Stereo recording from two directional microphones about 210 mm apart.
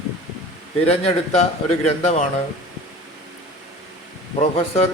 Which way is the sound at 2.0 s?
30° left (ahead or behind).